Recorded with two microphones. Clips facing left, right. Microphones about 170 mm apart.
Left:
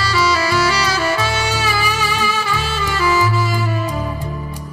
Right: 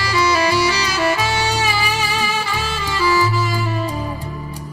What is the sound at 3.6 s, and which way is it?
Music, 25° right (ahead or behind).